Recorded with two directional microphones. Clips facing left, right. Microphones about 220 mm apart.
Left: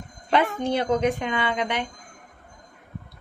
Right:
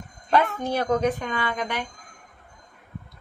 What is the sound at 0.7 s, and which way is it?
A woman's voice, 20° left (ahead or behind).